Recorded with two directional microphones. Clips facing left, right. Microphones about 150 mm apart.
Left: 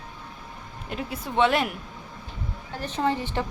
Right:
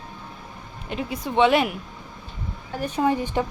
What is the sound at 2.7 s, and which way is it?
Speech, 10° right (ahead or behind).